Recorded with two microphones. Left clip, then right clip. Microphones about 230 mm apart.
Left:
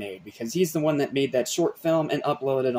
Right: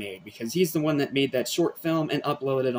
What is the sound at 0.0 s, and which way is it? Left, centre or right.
Speech, centre.